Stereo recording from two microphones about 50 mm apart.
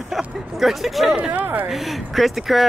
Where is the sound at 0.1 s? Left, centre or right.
Centre.